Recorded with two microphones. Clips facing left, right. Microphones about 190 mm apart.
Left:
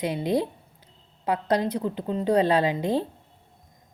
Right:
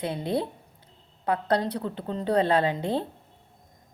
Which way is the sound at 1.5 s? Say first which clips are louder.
Left 4 dB; 15° left (ahead or behind).